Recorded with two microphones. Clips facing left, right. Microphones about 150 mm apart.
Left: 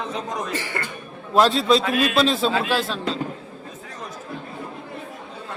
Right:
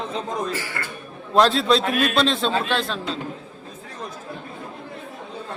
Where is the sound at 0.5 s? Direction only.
20° left (ahead or behind).